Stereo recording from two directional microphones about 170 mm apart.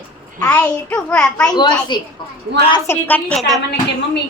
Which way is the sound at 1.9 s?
25° left (ahead or behind).